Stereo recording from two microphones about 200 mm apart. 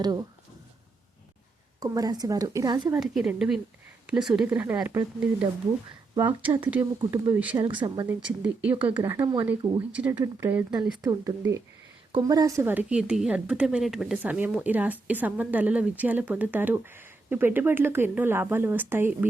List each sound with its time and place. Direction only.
0.0 s speech: 20° right (ahead or behind)
1.8 s speech: 20° right (ahead or behind)
3.0 s a woman's voice: 5° right (ahead or behind)
7.7 s speech: 20° right (ahead or behind)
8.0 s a woman's voice: 5° right (ahead or behind)
11.0 s a woman's voice: 15° right (ahead or behind)